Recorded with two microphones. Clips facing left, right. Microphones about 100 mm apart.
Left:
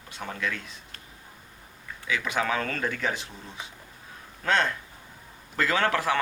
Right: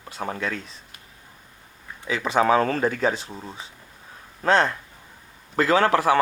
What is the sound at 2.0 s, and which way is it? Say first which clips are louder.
Speech: right 8 dB; 30° right (ahead or behind).